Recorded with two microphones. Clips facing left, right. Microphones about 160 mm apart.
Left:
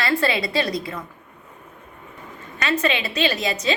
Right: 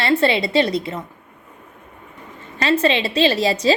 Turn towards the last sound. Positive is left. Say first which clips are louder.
# right 6 dB
turn(degrees=-35)  # may be behind; listen again after turning